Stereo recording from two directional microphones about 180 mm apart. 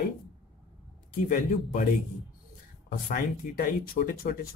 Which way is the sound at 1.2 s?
45° left (ahead or behind).